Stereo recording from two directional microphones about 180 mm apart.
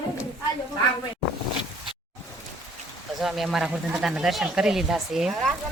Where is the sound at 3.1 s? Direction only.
Centre (ahead or behind).